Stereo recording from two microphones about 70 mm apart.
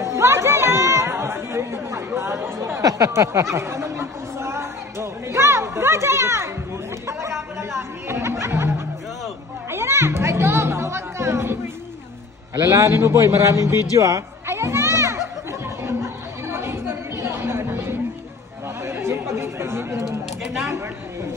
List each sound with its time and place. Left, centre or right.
0.0 s chatter: right
2.8 s chatter: right
7.1 s music: right
12.6 s a man's voice: right
13.9 s children playing: right
15.8 s chatter: right